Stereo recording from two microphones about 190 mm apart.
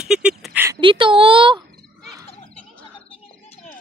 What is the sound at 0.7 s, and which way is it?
Speech, 25° right (ahead or behind).